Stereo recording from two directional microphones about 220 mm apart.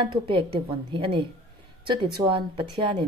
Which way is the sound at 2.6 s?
20° right (ahead or behind).